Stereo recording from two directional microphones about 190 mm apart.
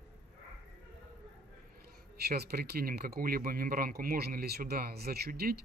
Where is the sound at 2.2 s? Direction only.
55° right (ahead or behind).